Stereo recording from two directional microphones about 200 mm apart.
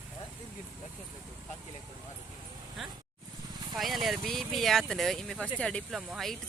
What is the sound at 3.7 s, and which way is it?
Speech, centre (ahead or behind).